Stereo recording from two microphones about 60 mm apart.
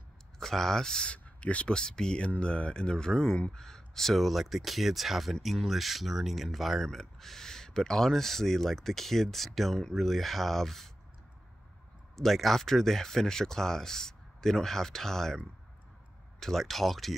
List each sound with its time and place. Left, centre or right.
0.4 s speech: centre
12.2 s speech: centre